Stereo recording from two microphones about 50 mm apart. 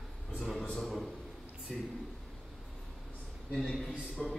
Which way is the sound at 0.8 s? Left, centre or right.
Centre.